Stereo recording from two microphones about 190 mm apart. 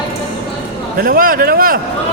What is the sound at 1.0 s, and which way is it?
Speech, 50° right (ahead or behind).